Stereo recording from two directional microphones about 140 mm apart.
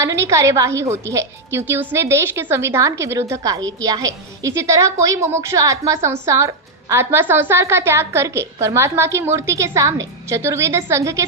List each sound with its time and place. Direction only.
0.0 s a woman's voice: 20° right (ahead or behind)